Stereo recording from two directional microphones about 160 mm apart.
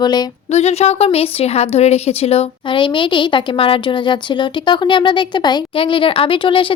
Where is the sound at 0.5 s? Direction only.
40° left (ahead or behind).